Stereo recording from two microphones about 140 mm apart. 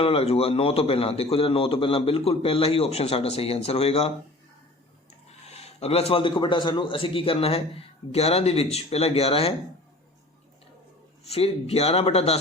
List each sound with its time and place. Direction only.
0.0 s a man's voice: 45° left (ahead or behind)
5.5 s a man's voice: 50° left (ahead or behind)
11.3 s a man's voice: 45° left (ahead or behind)